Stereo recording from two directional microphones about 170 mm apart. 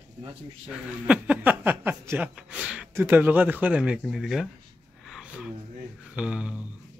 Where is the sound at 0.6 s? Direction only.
5° right (ahead or behind).